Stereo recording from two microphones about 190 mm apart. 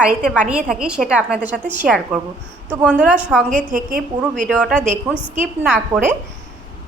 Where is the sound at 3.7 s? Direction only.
45° right (ahead or behind).